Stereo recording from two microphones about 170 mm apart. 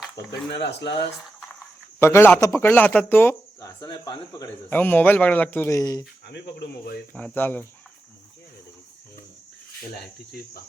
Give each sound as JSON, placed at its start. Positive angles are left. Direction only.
{"t": 0.5, "sound": "speech", "side_deg": 90}
{"t": 2.0, "sound": "speech", "side_deg": 15}
{"t": 4.7, "sound": "speech", "side_deg": 10}
{"t": 6.2, "sound": "speech", "side_deg": 75}
{"t": 7.1, "sound": "speech", "side_deg": 10}
{"t": 9.9, "sound": "speech", "side_deg": 70}